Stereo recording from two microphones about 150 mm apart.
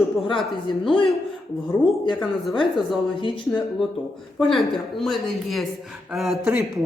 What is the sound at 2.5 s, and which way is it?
Speech, 35° left (ahead or behind).